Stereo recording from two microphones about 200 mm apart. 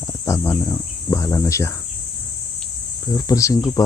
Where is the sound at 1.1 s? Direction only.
15° left (ahead or behind).